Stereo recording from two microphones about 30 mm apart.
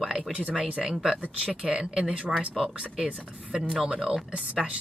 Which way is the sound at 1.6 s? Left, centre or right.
Right.